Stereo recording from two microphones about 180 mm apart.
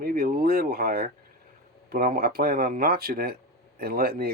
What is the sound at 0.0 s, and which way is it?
Speech, 55° right (ahead or behind).